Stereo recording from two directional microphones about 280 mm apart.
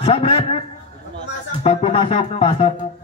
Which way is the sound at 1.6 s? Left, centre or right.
Left.